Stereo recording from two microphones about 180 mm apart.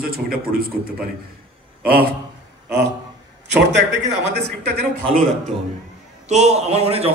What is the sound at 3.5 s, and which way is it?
Speech, 75° right (ahead or behind).